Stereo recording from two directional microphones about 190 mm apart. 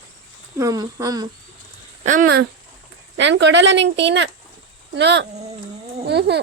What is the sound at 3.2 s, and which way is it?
A woman's voice, 70° right (ahead or behind).